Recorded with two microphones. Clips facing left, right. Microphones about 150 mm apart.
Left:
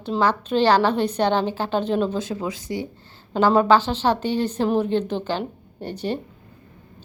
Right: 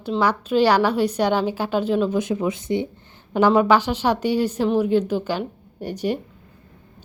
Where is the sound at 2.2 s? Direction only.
20° right (ahead or behind).